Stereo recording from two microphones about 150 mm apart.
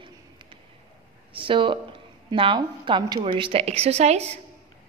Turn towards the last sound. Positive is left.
turn(degrees=-45)  # may be behind; listen again after turning